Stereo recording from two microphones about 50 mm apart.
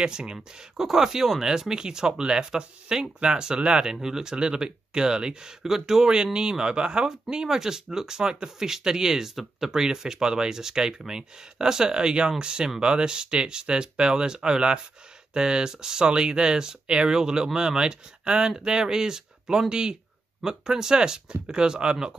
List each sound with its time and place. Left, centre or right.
0.0 s speech: centre